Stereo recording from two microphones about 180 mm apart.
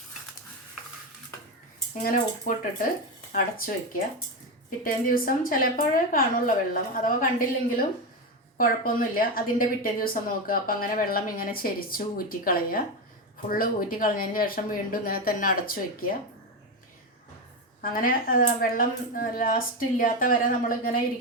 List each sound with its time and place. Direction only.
2.5 s a woman's voice: 50° left (ahead or behind)
17.7 s a woman's voice: 50° left (ahead or behind)